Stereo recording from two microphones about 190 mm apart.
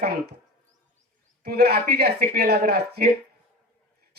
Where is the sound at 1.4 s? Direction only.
55° right (ahead or behind).